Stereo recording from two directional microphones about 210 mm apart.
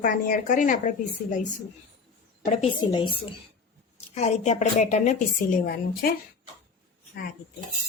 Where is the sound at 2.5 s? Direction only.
30° left (ahead or behind).